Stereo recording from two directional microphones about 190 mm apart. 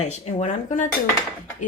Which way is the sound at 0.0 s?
35° left (ahead or behind).